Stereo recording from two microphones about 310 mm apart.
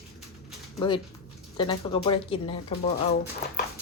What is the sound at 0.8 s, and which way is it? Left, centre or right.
Speech, centre.